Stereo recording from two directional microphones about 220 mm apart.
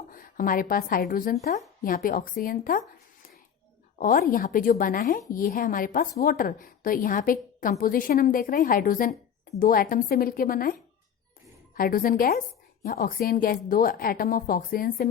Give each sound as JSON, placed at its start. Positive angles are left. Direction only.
{"t": 0.1, "sound": "a woman's voice", "side_deg": 40}
{"t": 3.9, "sound": "a woman's voice", "side_deg": 35}